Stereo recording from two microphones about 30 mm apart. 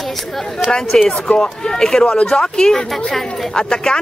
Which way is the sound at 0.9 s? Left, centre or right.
Left.